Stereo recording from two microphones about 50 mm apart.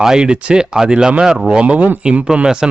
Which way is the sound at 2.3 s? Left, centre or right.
Centre.